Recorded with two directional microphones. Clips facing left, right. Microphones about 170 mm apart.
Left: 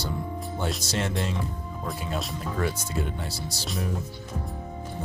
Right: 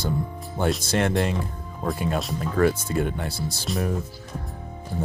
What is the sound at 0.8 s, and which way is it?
Speech, 55° right (ahead or behind).